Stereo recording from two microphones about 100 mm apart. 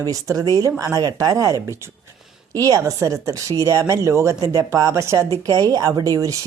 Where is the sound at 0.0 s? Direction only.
35° right (ahead or behind).